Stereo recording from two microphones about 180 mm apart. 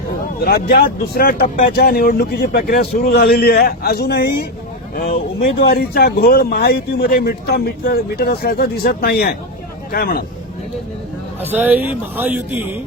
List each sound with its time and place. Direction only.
0.4 s speech: 55° left (ahead or behind)
11.5 s a man's voice: 10° right (ahead or behind)